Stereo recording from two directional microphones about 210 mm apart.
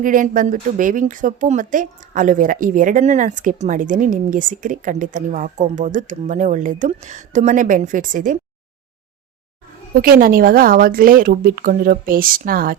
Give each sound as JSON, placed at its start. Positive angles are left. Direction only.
{"t": 0.0, "sound": "speech", "side_deg": -40}
{"t": 9.9, "sound": "speech", "side_deg": -45}